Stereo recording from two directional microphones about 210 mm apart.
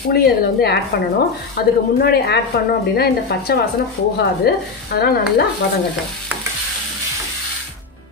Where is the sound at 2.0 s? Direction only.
50° left (ahead or behind).